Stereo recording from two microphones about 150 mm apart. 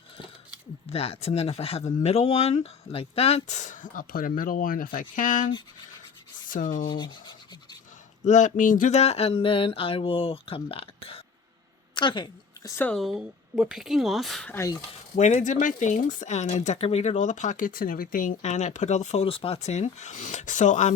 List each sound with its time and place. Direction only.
0.9 s speech: 40° left (ahead or behind); by 5.5 s 60° left (ahead or behind)
6.5 s speech: 60° left (ahead or behind)
6.9 s a sound: 30° left (ahead or behind)
8.2 s speech: 55° left (ahead or behind)
9.0 s a woman's voice: 40° left (ahead or behind)
12.7 s speech: 10° left (ahead or behind)
13.0 s speech: centre (ahead or behind)
14.5 s speech: 20° left (ahead or behind)
15.1 s speech: 50° left (ahead or behind)